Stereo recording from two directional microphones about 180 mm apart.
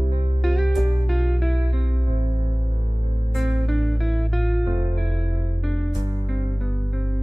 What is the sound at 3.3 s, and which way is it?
Music, centre (ahead or behind).